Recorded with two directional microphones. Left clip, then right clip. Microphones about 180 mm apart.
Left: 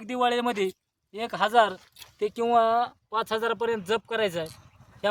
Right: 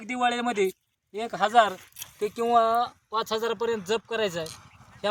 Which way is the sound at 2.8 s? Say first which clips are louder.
Even; 5° left (ahead or behind).